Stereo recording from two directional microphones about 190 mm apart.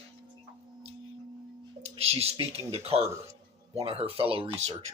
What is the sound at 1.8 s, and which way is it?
Speech, 30° right (ahead or behind).